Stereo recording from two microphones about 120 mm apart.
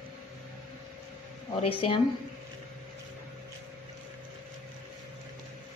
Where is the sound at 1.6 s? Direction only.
50° left (ahead or behind).